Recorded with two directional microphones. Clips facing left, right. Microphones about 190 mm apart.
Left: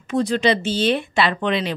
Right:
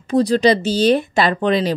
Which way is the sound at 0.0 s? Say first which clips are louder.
Right 5 dB; 35° right (ahead or behind).